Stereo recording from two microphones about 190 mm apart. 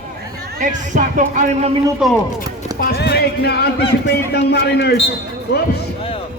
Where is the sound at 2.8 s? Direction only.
60° left (ahead or behind).